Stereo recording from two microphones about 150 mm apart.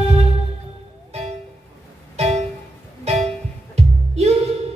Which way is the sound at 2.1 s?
45° right (ahead or behind).